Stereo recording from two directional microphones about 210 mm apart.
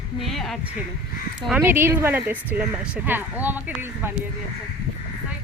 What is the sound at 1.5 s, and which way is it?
Speech, 10° right (ahead or behind).